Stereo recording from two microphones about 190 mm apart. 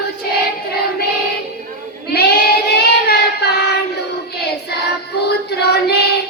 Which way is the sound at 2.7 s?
60° left (ahead or behind).